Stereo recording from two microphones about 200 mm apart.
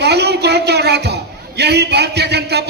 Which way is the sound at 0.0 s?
55° right (ahead or behind).